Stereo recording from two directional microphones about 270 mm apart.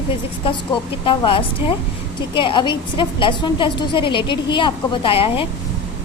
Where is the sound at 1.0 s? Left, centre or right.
Centre.